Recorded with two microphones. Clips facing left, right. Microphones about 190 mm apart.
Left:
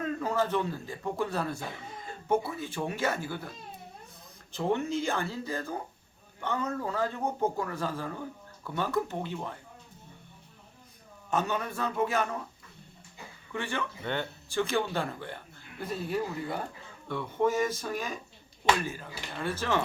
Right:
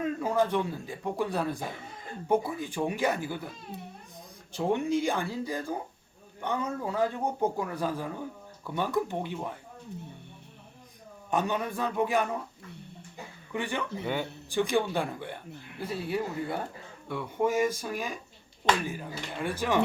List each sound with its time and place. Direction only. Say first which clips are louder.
0.0 s speech: right 2 dB; 15° right (ahead or behind)
4.5 s speech: right 2 dB; 10° right (ahead or behind)
11.3 s speech: right 1 dB; 15° right (ahead or behind)
13.5 s speech: right 2 dB; 15° right (ahead or behind)